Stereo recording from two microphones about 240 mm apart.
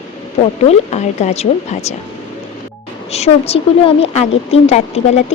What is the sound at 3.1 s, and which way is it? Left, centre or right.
A woman's voice, left.